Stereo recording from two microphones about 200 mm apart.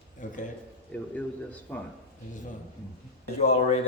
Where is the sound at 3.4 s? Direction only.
30° left (ahead or behind).